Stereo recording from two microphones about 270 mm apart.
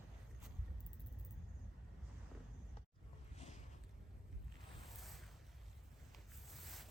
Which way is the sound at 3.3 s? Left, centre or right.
Left.